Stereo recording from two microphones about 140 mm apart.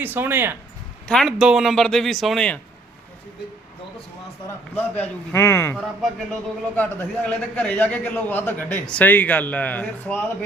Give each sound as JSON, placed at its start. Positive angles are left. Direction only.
{"t": 0.0, "sound": "speech", "side_deg": -15}
{"t": 1.0, "sound": "a man's voice", "side_deg": 5}
{"t": 4.9, "sound": "a man's voice", "side_deg": 20}
{"t": 5.7, "sound": "a man's voice", "side_deg": 0}
{"t": 6.7, "sound": "a man's voice", "side_deg": 10}